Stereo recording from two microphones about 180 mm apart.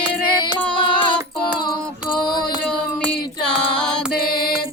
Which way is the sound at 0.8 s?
25° left (ahead or behind).